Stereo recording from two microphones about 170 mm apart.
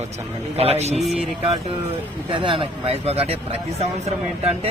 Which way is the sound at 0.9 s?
Centre (ahead or behind).